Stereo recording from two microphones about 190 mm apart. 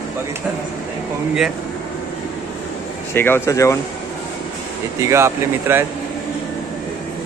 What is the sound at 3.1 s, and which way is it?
Speech, 10° left (ahead or behind).